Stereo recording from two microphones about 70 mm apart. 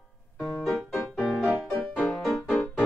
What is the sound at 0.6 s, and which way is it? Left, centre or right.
Music, centre.